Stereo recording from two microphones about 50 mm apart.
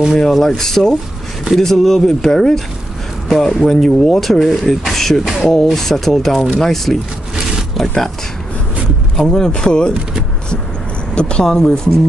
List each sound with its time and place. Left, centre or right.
0.2 s speech: centre
9.2 s speech: centre
11.1 s speech: centre